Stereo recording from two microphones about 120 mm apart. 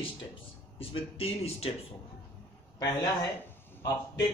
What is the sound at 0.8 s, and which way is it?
Speech, 55° left (ahead or behind).